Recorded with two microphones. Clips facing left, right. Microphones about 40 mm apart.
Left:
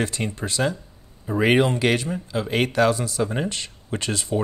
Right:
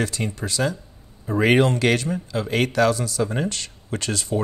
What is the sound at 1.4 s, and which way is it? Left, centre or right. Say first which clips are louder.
Speech: right 1 dB; centre.